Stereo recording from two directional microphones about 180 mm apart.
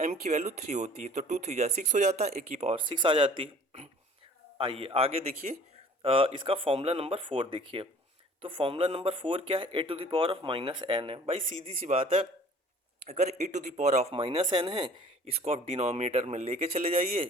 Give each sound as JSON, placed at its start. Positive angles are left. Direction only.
{"t": 0.0, "sound": "speech", "side_deg": -40}
{"t": 5.4, "sound": "speech", "side_deg": -45}
{"t": 6.0, "sound": "speech", "side_deg": -30}